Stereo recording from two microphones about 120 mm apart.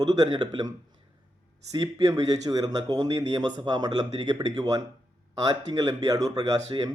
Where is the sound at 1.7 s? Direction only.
30° right (ahead or behind).